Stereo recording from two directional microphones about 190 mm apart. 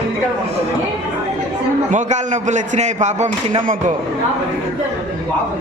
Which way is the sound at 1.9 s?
40° right (ahead or behind).